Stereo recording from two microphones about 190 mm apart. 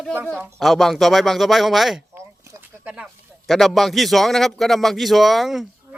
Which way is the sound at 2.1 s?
10° right (ahead or behind).